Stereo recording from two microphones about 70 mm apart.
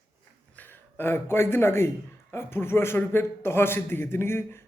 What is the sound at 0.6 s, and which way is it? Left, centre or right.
A man's voice, left.